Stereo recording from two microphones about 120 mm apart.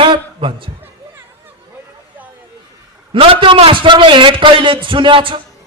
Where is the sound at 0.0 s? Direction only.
45° right (ahead or behind).